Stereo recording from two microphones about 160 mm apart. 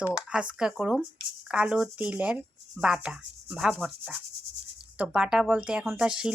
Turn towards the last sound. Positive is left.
turn(degrees=-5)  # may be behind; listen again after turning